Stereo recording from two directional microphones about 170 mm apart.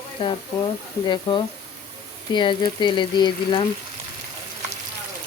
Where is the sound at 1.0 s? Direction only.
25° left (ahead or behind).